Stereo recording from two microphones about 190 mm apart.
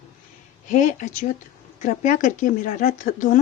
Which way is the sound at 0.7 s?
40° left (ahead or behind).